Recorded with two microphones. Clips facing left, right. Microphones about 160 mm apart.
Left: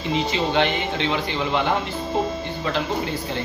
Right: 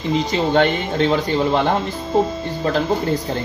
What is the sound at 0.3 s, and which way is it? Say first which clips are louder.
Speech: right 6 dB; 45° right (ahead or behind).